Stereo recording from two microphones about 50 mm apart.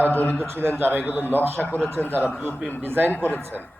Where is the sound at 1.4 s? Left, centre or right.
Right.